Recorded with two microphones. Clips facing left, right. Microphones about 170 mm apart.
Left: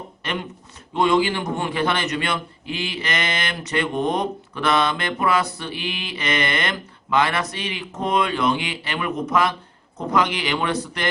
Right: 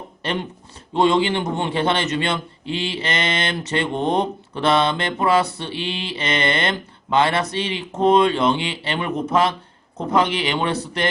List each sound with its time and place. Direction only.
0.2 s a man's voice: 30° right (ahead or behind)